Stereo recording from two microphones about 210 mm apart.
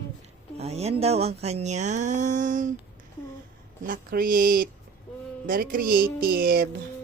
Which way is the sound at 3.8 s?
45° right (ahead or behind).